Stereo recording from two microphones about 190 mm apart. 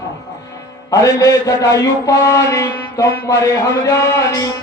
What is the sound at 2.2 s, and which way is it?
Mantra, 15° left (ahead or behind).